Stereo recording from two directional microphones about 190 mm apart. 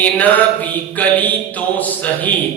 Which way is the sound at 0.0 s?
10° left (ahead or behind).